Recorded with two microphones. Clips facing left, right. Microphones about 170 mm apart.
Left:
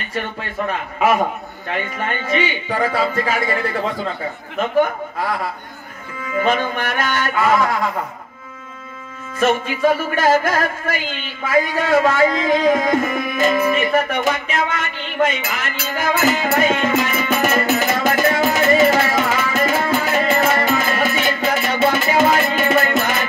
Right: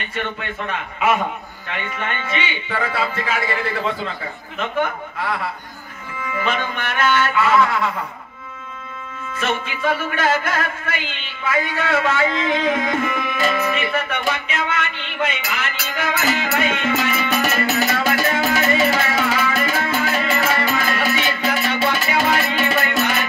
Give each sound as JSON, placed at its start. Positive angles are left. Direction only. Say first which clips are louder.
{"t": 0.1, "sound": "music", "louder": "left 2 dB", "side_deg": 40}
{"t": 9.4, "sound": "music", "louder": "left 7 dB", "side_deg": 40}